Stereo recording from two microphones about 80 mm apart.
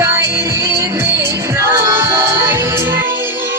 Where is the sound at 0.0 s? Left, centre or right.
Right.